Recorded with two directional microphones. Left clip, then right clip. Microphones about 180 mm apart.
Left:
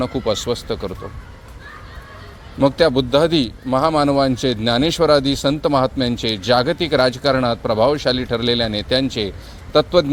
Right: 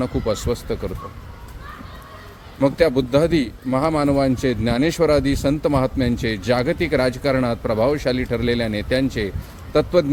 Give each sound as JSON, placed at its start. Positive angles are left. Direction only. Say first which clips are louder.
{"t": 0.0, "sound": "speech", "louder": "left 2 dB", "side_deg": -5}
{"t": 2.6, "sound": "a man's voice", "louder": "left 2 dB", "side_deg": -5}